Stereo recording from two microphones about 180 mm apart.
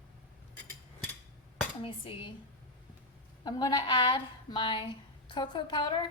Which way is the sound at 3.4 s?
25° left (ahead or behind).